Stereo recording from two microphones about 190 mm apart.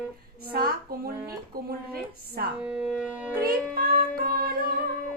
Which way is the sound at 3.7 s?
50° right (ahead or behind).